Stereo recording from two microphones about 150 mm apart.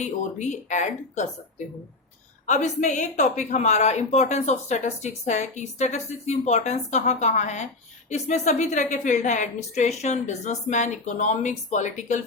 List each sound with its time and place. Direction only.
0.0 s a woman's voice: 50° left (ahead or behind)
2.8 s a woman's voice: 55° left (ahead or behind)